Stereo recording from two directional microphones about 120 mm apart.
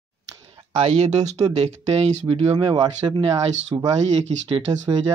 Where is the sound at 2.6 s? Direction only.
40° right (ahead or behind).